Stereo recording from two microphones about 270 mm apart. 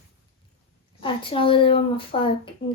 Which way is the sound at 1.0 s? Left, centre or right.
Centre.